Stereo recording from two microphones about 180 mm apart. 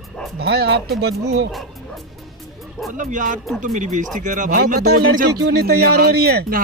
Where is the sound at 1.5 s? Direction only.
Centre (ahead or behind).